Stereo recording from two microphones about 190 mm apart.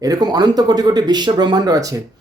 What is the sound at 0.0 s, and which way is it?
Speech, 20° right (ahead or behind).